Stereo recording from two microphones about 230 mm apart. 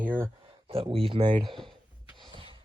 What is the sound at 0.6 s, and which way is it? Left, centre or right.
Speech, right.